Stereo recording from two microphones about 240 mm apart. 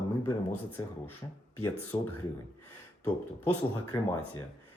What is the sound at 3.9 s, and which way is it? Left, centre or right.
Speech, centre.